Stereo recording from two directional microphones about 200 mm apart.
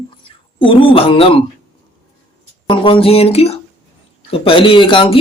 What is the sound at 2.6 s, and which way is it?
Speech, 25° left (ahead or behind).